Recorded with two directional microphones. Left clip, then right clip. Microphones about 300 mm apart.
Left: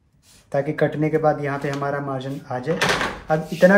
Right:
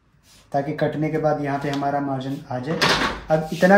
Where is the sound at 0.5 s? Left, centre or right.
Centre.